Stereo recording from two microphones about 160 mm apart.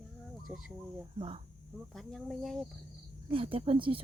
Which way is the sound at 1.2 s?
35° right (ahead or behind).